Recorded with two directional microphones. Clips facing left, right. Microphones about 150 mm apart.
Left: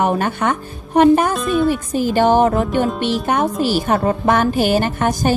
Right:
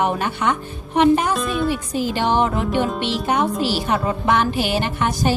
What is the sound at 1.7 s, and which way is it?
Speech, 50° left (ahead or behind).